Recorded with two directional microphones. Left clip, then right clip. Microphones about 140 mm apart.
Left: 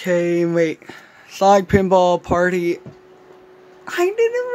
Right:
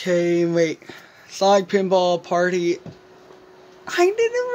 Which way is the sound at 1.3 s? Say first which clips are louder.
Left 3 dB; 15° left (ahead or behind).